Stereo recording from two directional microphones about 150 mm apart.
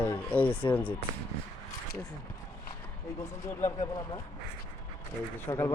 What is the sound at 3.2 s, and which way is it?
Speech, 20° left (ahead or behind).